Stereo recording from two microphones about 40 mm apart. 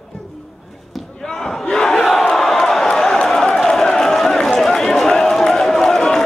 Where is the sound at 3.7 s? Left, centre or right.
Centre.